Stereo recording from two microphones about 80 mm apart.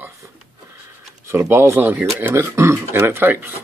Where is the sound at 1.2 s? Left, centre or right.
Right.